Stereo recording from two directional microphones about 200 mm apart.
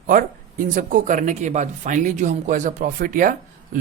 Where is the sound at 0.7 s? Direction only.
45° right (ahead or behind).